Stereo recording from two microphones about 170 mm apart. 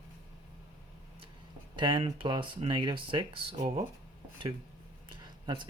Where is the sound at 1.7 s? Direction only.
30° right (ahead or behind).